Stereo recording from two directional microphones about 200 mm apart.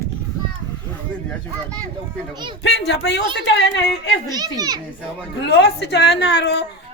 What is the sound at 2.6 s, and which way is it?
A woman's voice, 60° left (ahead or behind).